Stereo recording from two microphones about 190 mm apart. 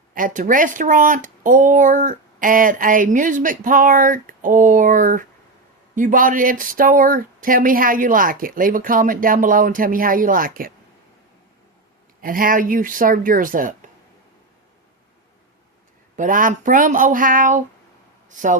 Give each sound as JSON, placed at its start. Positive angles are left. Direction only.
{"t": 0.1, "sound": "speech", "side_deg": -45}
{"t": 12.2, "sound": "speech", "side_deg": -45}
{"t": 16.1, "sound": "speech", "side_deg": -45}